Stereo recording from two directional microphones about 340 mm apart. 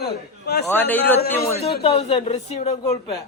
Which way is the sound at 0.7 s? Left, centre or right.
Centre.